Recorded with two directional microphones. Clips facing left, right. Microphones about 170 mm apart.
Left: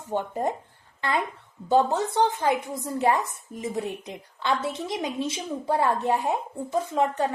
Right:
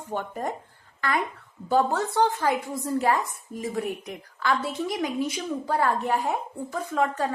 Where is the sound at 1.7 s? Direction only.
20° left (ahead or behind).